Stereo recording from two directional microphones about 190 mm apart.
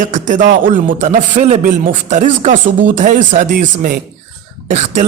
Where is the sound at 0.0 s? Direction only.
40° right (ahead or behind).